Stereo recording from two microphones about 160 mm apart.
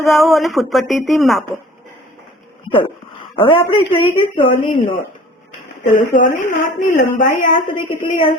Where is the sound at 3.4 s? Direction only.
35° left (ahead or behind).